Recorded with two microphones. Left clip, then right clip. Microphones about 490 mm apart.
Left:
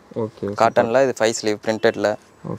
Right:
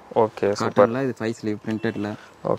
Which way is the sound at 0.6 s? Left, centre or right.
Left.